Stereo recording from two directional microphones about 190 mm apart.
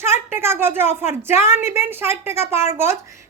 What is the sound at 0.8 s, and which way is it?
A woman's voice, 10° right (ahead or behind).